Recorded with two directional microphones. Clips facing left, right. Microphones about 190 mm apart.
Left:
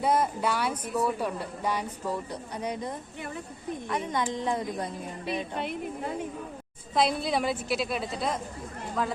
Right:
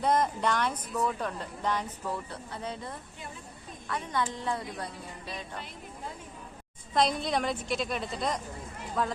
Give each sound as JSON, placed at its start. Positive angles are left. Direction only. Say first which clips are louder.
{"t": 0.0, "sound": "a woman's voice", "louder": "left 1 dB", "side_deg": 5}
{"t": 5.5, "sound": "a woman's voice", "louder": "left 10 dB", "side_deg": 65}
{"t": 6.9, "sound": "a woman's voice", "louder": "left 1 dB", "side_deg": 5}